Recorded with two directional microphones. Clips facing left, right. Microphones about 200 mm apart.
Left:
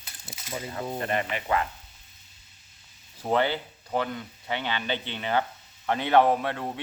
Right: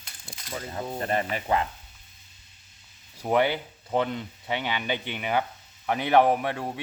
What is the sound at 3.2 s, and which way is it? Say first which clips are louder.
Speech: right 2 dB; 15° right (ahead or behind).